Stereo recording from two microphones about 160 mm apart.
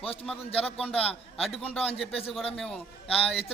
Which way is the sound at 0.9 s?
10° left (ahead or behind).